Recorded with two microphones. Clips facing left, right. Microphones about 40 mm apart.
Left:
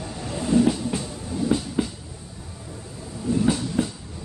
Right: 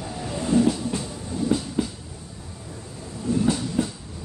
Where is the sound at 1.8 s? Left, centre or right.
Left.